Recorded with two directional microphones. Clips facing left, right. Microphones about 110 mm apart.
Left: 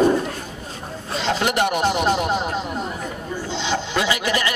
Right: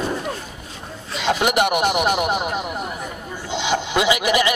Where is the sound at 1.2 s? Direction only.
15° right (ahead or behind).